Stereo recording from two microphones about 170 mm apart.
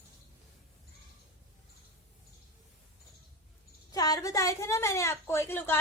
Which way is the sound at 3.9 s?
20° left (ahead or behind).